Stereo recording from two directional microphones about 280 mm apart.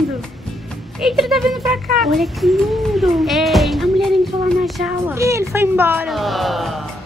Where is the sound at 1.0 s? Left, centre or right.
Centre.